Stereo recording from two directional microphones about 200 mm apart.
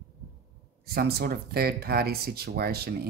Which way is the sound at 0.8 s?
50° right (ahead or behind).